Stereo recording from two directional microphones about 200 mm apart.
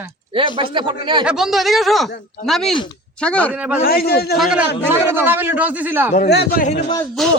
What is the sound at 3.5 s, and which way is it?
Speech, 5° right (ahead or behind).